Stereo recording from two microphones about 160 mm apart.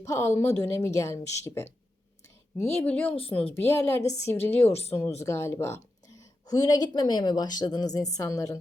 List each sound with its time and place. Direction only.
0.0 s speech: 20° left (ahead or behind)
2.7 s speech: 10° left (ahead or behind)
3.1 s speech: 35° left (ahead or behind)
3.5 s speech: 15° left (ahead or behind)
4.7 s speech: 40° left (ahead or behind)
5.2 s a woman's voice: 15° left (ahead or behind)